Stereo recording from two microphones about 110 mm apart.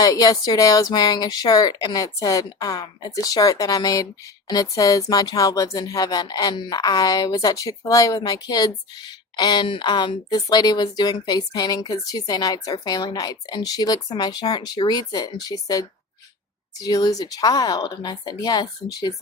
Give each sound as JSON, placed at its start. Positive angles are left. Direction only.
{"t": 0.0, "sound": "speech", "side_deg": 35}